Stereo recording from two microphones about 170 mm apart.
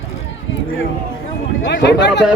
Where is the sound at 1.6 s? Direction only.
85° left.